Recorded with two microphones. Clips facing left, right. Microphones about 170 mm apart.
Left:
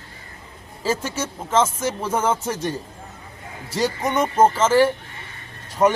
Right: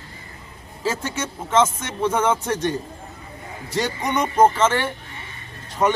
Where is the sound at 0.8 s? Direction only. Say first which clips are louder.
Left 1 dB; 5° left (ahead or behind).